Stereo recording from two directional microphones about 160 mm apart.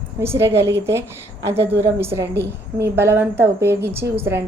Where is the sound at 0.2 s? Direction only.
15° right (ahead or behind).